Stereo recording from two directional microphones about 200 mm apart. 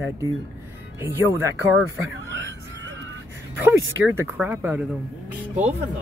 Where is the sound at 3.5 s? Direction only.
10° right (ahead or behind).